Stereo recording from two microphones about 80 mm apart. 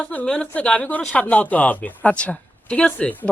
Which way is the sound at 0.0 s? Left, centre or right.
Centre.